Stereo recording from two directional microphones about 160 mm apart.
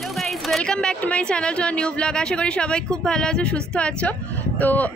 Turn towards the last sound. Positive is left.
turn(degrees=10)  # may be behind; listen again after turning